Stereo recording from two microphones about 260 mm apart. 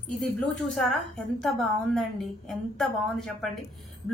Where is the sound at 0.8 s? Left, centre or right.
Centre.